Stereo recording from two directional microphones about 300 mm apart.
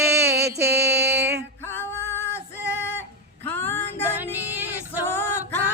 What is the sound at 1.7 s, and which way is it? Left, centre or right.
Male singing, centre.